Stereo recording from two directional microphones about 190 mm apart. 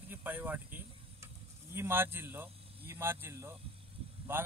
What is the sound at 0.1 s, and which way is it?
Vehicle, 10° right (ahead or behind).